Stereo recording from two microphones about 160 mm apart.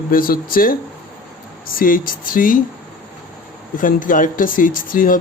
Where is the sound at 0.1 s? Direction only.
60° left (ahead or behind).